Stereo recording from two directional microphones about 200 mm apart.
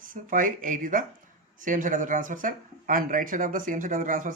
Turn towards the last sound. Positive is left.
turn(degrees=-40)  # may be behind; listen again after turning